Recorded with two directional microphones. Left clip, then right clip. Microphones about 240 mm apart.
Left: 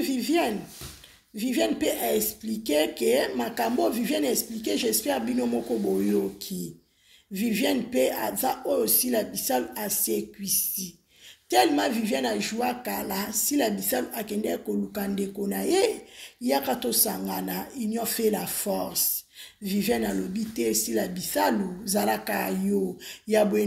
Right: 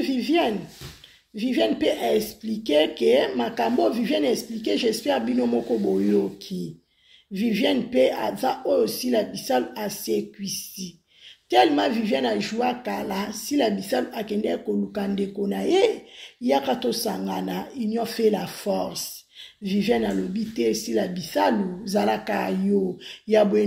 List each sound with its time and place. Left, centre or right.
0.0 s speech: centre